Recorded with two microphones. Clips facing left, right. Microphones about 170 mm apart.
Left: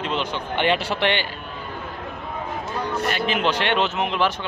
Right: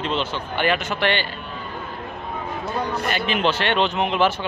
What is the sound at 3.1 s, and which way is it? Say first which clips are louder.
Speech: right 1 dB; 5° left (ahead or behind).